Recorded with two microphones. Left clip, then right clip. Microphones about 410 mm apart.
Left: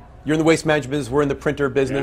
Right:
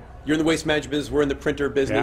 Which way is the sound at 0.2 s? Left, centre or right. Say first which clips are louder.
Left 4 dB; left.